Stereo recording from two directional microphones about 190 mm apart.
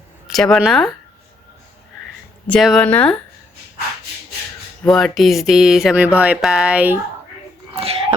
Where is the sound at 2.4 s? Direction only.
5° left (ahead or behind).